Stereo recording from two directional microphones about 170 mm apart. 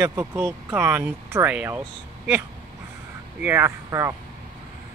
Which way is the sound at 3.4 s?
15° right (ahead or behind).